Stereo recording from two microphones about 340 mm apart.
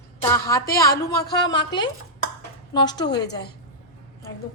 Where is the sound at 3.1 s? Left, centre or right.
Left.